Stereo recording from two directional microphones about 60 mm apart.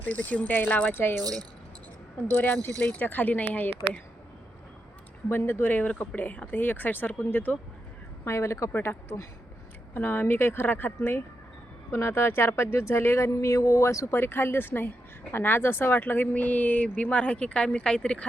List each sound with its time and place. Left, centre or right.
0.0 s speech: left
2.3 s speech: left
5.3 s speech: left
5.7 s speech: left
8.2 s speech: left
8.7 s speech: left
11.9 s speech: left
14.1 s speech: left; by 18.3 s centre